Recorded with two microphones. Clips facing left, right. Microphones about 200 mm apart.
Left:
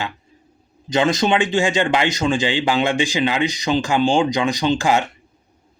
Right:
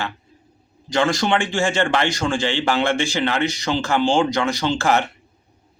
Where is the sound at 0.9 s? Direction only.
20° left (ahead or behind).